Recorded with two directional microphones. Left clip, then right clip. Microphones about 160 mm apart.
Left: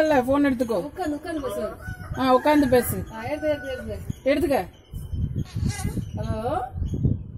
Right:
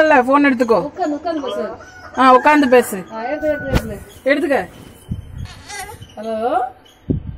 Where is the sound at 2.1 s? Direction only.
Centre (ahead or behind).